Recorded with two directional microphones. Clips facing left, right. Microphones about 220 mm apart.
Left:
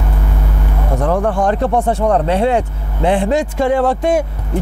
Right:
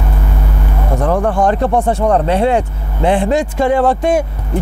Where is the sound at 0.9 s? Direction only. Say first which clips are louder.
Right 1 dB; 25° right (ahead or behind).